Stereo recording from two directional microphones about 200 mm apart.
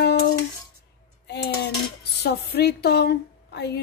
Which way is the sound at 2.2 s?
55° left (ahead or behind).